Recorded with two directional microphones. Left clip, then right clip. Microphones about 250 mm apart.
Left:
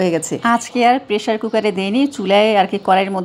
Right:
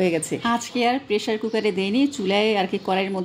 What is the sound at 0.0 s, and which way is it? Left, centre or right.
A woman's voice, centre.